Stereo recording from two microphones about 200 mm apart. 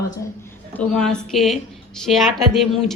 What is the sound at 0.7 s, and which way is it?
A woman's voice, 5° left (ahead or behind).